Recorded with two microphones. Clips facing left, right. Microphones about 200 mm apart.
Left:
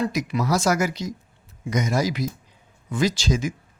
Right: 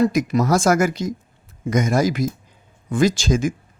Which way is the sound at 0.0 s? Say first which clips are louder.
Right 7 dB; 45° right (ahead or behind).